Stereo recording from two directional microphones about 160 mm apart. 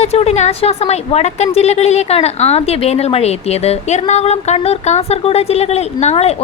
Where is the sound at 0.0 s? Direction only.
40° left (ahead or behind).